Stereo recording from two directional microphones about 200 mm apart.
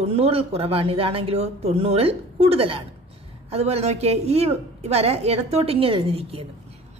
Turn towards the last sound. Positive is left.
turn(degrees=-25)  # may be behind; listen again after turning